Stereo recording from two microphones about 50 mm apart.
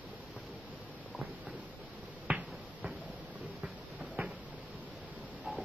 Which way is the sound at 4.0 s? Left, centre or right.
Right.